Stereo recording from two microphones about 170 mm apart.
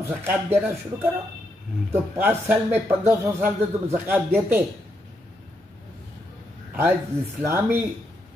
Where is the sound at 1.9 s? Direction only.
10° right (ahead or behind).